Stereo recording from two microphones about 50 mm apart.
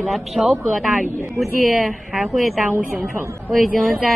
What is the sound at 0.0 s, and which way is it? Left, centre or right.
A woman's voice, centre.